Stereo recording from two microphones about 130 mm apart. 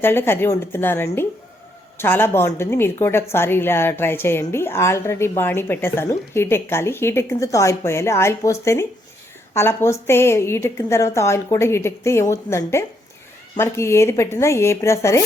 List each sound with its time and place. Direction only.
0.0 s a woman's voice: 15° left (ahead or behind)